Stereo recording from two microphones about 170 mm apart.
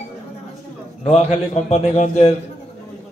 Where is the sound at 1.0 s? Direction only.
40° left (ahead or behind).